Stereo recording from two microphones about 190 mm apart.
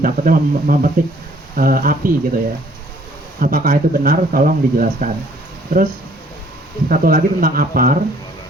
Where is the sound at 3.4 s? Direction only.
50° right (ahead or behind).